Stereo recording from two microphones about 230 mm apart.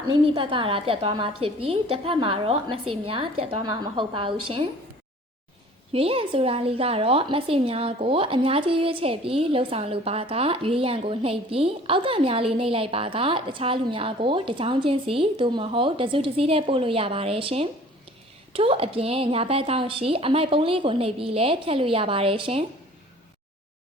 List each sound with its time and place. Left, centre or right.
0.1 s a woman's voice: right
5.9 s a woman's voice: right